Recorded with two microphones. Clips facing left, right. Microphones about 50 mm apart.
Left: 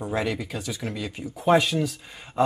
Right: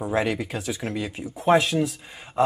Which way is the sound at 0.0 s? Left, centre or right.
Centre.